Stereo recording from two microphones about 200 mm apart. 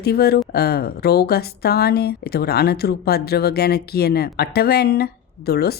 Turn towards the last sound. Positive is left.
turn(degrees=50)  # may be behind; listen again after turning